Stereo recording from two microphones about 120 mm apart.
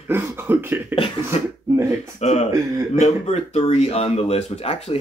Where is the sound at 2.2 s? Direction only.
65° left (ahead or behind).